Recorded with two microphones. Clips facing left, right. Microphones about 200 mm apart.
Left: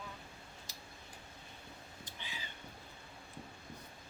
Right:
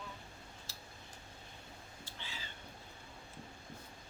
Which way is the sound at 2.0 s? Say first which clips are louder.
Even; 15° left (ahead or behind).